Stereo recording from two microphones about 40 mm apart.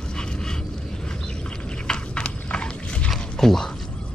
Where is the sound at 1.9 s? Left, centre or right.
Left.